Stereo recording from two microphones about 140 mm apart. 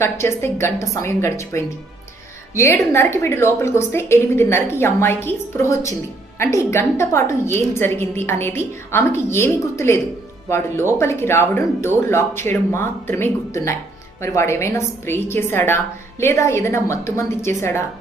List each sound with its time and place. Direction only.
0.0 s a woman's voice: 20° left (ahead or behind)